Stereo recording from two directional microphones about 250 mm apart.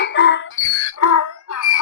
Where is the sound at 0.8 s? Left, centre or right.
Left.